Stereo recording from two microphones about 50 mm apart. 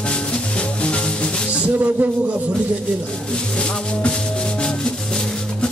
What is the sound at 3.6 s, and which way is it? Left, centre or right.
Speech, centre.